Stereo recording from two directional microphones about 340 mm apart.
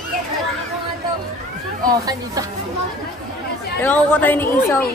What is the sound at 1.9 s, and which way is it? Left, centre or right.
Speech, centre.